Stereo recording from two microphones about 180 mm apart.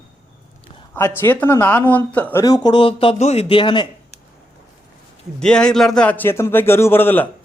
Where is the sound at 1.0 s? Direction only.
10° left (ahead or behind).